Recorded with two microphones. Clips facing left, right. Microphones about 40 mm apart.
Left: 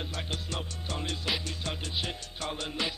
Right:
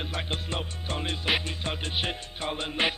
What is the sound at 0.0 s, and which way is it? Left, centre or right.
Music, right.